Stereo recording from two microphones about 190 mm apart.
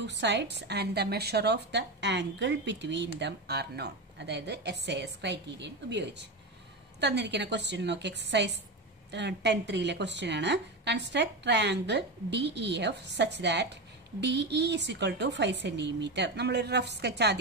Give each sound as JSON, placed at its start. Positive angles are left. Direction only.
{"t": 0.0, "sound": "speech", "side_deg": -65}